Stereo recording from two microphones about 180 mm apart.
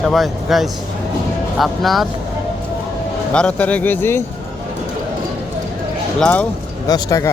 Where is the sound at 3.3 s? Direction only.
5° left (ahead or behind).